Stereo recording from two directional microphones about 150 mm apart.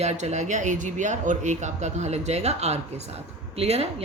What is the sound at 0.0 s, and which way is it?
Speech, 50° right (ahead or behind).